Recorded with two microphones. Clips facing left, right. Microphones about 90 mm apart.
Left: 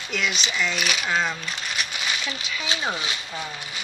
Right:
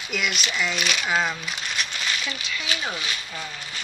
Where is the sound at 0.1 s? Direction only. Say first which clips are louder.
Even; 5° right (ahead or behind).